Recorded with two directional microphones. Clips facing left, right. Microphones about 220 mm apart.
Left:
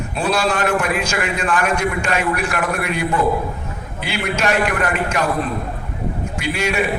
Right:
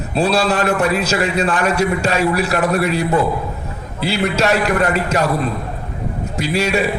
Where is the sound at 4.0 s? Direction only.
35° right (ahead or behind).